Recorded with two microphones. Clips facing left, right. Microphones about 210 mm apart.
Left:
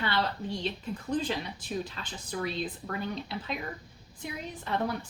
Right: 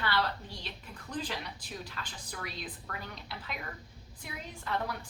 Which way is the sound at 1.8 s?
25° left (ahead or behind).